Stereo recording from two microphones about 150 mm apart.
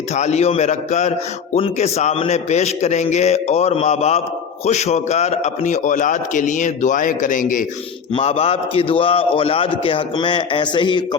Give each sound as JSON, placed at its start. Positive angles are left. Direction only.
{"t": 0.2, "sound": "a man's voice", "side_deg": 45}
{"t": 8.1, "sound": "a man's voice", "side_deg": 40}